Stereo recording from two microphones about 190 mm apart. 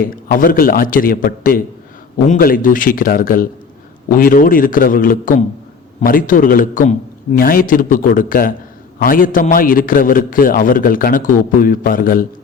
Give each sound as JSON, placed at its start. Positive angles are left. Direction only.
{"t": 0.0, "sound": "a man's voice", "side_deg": 50}